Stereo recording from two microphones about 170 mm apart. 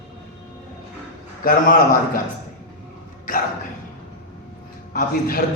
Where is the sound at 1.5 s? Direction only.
55° left (ahead or behind).